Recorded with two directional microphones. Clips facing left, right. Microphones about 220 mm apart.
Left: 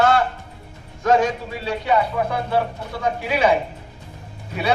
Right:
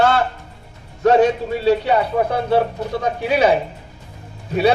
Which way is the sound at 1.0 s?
35° right (ahead or behind).